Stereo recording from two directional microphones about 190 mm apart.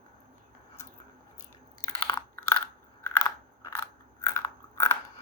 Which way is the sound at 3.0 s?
15° left (ahead or behind).